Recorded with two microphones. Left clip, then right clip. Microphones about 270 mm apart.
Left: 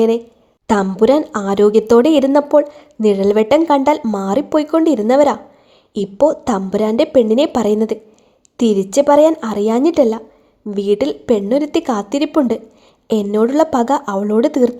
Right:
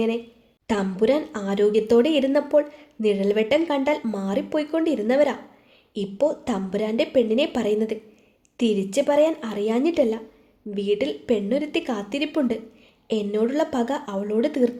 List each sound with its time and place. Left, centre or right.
0.7 s speech: left